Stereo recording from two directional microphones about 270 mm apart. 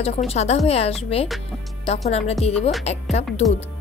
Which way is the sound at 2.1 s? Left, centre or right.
Left.